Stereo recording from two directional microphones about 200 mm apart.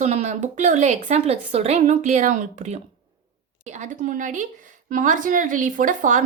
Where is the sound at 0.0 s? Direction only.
35° right (ahead or behind).